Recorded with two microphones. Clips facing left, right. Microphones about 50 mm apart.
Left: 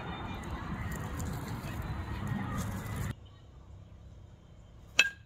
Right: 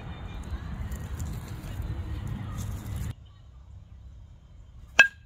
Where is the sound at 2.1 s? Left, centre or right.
Left.